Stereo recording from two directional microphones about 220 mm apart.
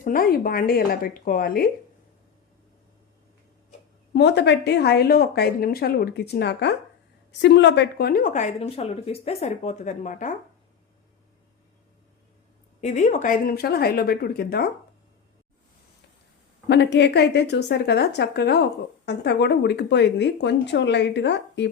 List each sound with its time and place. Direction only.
0.0 s speech: 40° left (ahead or behind)
4.1 s a woman's voice: 50° left (ahead or behind); by 10.3 s 35° left (ahead or behind)
12.8 s a woman's voice: 30° left (ahead or behind)
16.6 s a woman's voice: 50° left (ahead or behind)